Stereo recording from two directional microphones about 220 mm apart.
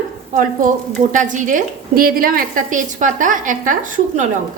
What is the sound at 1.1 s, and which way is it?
A woman's voice, 35° right (ahead or behind).